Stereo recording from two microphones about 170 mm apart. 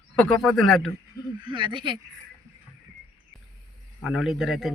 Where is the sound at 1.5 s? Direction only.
30° right (ahead or behind).